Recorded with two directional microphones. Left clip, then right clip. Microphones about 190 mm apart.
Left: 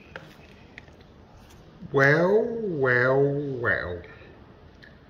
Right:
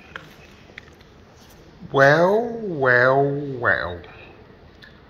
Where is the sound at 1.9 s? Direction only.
5° left (ahead or behind).